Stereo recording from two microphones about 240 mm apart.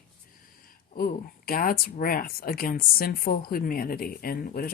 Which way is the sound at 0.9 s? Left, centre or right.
Left.